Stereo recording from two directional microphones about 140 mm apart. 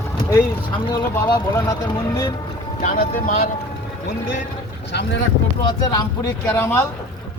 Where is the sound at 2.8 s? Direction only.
85° left.